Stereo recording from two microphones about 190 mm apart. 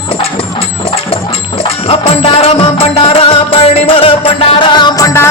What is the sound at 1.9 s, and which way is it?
Music, 30° left (ahead or behind).